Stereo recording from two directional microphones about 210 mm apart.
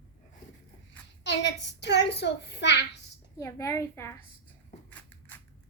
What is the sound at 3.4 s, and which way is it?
Speech, 15° left (ahead or behind).